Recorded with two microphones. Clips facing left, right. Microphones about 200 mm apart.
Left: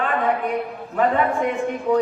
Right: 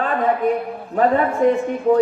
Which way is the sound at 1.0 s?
40° right (ahead or behind).